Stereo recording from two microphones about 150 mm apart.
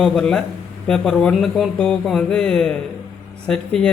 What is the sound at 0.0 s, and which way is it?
Speech, 5° left (ahead or behind).